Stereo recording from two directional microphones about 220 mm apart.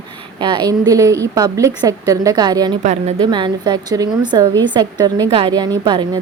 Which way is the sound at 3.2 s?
20° right (ahead or behind).